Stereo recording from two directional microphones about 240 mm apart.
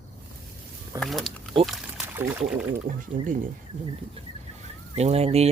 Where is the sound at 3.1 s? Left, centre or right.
Right.